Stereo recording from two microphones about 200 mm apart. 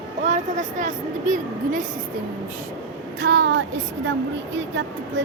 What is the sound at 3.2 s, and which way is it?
Speech, 60° right (ahead or behind).